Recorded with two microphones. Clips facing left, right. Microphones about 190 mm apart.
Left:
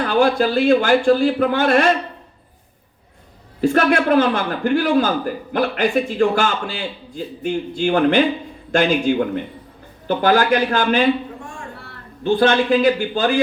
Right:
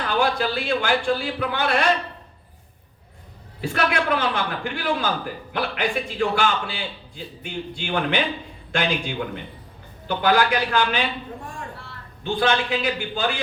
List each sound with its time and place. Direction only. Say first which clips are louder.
0.0 s a man's voice: left 6 dB; 45° left (ahead or behind)
3.6 s a man's voice: left 8 dB; 45° left (ahead or behind)
12.2 s a man's voice: left 7 dB; 45° left (ahead or behind)